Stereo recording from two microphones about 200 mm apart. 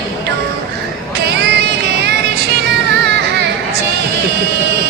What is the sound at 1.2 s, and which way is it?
Music, 55° right (ahead or behind).